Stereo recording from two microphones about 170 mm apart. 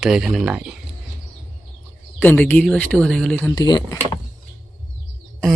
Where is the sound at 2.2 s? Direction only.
10° left (ahead or behind).